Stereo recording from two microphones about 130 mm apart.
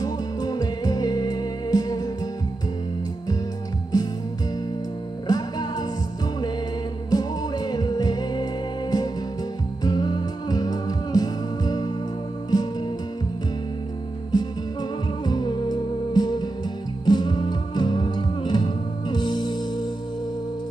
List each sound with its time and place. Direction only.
0.0 s music: 30° left (ahead or behind)
3.9 s music: 30° left (ahead or behind)
5.3 s music: 30° left (ahead or behind)
7.1 s music: 30° left (ahead or behind)
14.3 s music: 35° left (ahead or behind)